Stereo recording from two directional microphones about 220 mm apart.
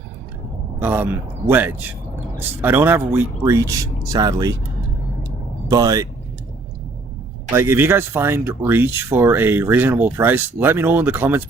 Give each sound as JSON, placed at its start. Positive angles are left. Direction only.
{"t": 0.8, "sound": "speech", "side_deg": -10}
{"t": 5.6, "sound": "speech", "side_deg": -15}
{"t": 7.5, "sound": "speech", "side_deg": -10}